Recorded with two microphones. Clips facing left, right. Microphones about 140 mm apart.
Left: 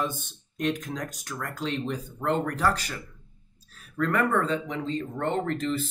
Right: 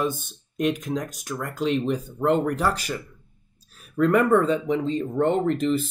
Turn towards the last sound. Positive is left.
turn(degrees=-15)  # may be behind; listen again after turning